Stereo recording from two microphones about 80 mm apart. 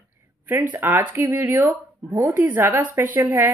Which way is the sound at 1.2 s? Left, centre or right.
Right.